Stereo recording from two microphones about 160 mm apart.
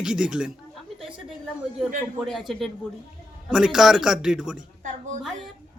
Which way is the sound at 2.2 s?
Centre (ahead or behind).